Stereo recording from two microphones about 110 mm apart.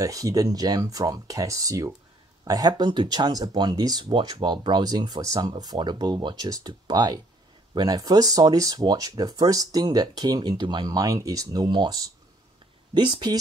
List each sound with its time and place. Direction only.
0.0 s speech: 30° right (ahead or behind)